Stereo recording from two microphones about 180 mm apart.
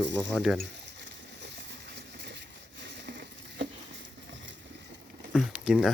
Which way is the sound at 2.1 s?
75° right (ahead or behind).